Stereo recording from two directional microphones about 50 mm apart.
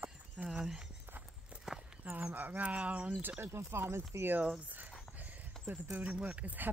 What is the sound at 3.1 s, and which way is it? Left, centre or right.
Speech, right.